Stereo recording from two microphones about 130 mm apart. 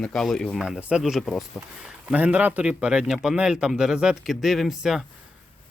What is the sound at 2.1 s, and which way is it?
A man's voice, 10° right (ahead or behind).